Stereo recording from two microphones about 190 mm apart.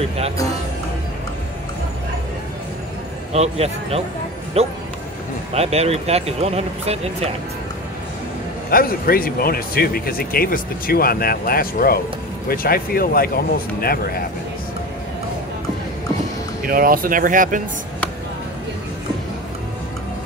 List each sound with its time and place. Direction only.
3.3 s speech: 35° right (ahead or behind)
8.6 s speech: 50° left (ahead or behind)
16.6 s speech: 50° right (ahead or behind)